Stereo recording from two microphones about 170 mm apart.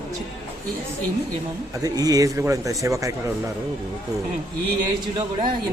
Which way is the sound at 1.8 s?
20° right (ahead or behind).